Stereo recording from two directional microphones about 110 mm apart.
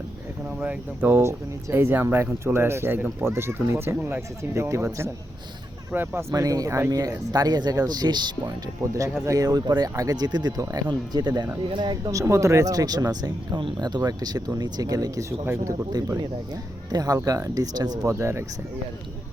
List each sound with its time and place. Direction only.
0.6 s speech: 20° right (ahead or behind)
6.3 s speech: 35° right (ahead or behind)
12.1 s speech: 30° right (ahead or behind)